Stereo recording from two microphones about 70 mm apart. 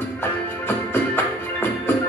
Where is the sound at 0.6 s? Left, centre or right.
Left.